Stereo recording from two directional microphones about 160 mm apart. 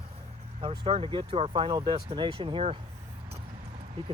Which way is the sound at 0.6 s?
35° right (ahead or behind).